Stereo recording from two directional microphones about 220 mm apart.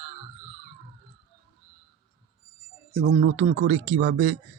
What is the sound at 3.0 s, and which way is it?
Speech, 45° right (ahead or behind).